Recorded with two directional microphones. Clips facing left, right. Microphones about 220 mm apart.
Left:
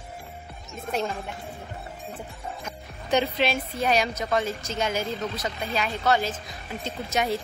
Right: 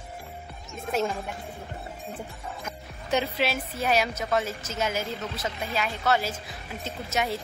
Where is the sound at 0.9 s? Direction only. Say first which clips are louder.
Right 1 dB; centre (ahead or behind).